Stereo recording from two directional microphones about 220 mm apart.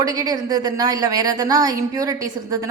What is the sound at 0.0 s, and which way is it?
A woman's voice, 15° right (ahead or behind).